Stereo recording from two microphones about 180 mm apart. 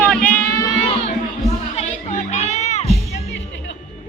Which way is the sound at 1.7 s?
35° left (ahead or behind).